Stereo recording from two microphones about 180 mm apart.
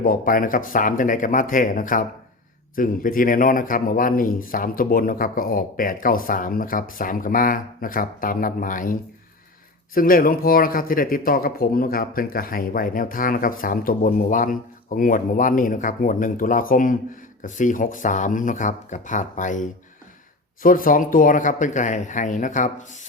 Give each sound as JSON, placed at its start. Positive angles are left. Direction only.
{"t": 0.0, "sound": "speech", "side_deg": 50}